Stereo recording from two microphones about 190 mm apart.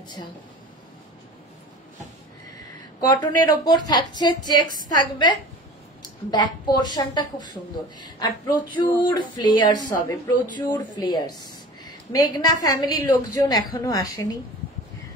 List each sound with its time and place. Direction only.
3.1 s a woman's voice: 20° left (ahead or behind)
6.3 s a woman's voice: 25° left (ahead or behind)